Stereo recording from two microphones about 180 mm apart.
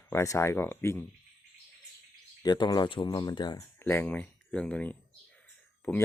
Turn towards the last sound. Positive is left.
turn(degrees=10)  # may be behind; listen again after turning